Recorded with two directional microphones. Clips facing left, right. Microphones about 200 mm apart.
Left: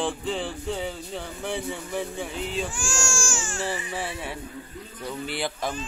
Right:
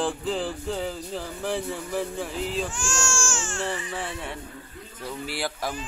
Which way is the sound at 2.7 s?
15° left (ahead or behind).